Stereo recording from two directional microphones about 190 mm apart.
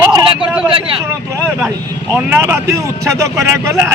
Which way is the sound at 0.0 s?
20° right (ahead or behind).